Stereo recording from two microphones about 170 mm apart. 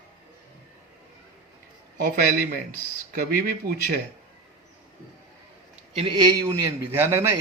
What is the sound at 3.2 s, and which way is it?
Speech, 60° right (ahead or behind).